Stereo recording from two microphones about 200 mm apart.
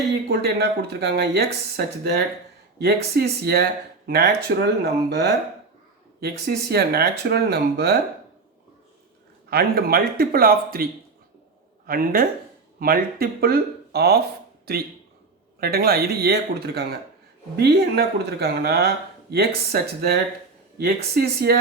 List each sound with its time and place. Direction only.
0.3 s speech: 55° right (ahead or behind)
9.5 s speech: 50° right (ahead or behind)
11.9 s speech: 45° right (ahead or behind)